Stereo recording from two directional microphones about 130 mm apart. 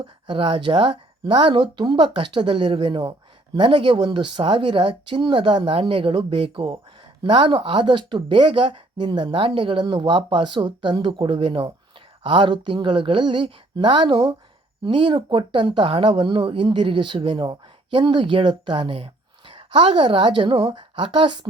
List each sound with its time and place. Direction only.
0.0 s speech: 45° right (ahead or behind)